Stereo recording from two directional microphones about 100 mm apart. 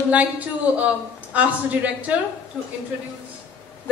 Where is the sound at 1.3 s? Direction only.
15° right (ahead or behind).